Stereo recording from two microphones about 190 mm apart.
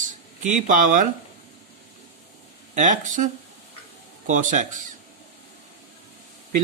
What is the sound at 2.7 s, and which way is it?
Speech, 40° right (ahead or behind).